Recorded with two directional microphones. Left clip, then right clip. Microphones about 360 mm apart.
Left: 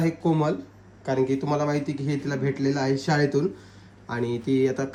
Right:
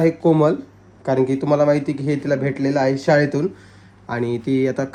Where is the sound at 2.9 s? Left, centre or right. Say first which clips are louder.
Right 7 dB; centre.